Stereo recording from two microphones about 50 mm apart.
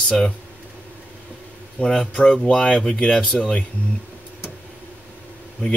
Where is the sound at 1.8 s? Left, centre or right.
Centre.